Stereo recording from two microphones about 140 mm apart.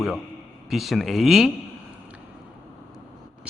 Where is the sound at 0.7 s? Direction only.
Centre (ahead or behind).